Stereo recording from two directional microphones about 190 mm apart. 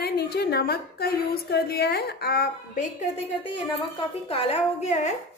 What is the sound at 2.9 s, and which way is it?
A woman's voice, 30° left (ahead or behind).